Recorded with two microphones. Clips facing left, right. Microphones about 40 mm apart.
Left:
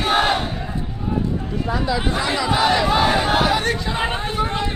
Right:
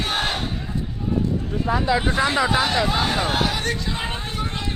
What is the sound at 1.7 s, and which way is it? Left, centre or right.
Speech, centre.